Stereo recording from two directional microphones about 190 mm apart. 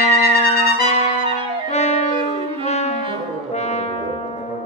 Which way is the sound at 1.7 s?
35° left (ahead or behind).